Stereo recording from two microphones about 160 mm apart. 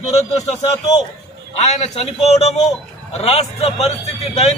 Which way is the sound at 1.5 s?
40° left (ahead or behind).